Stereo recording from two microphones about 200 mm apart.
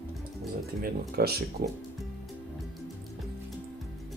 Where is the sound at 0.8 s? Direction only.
50° right (ahead or behind).